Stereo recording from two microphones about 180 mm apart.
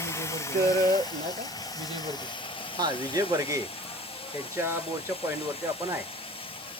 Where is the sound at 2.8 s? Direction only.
20° right (ahead or behind).